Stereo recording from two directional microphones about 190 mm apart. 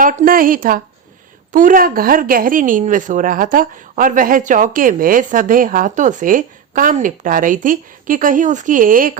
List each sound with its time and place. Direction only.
0.0 s a woman's voice: 45° right (ahead or behind)